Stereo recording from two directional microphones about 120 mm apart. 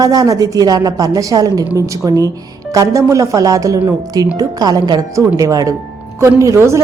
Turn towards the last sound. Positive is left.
turn(degrees=-25)  # may be behind; listen again after turning